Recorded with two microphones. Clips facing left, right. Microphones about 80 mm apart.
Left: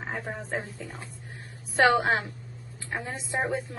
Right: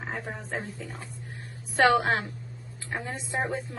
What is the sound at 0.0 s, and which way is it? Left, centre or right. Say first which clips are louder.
Speech: left 1 dB; centre.